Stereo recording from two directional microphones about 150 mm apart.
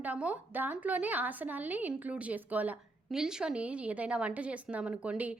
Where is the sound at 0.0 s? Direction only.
10° right (ahead or behind).